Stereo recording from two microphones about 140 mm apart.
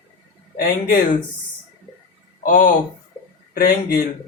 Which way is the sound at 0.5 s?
90° left.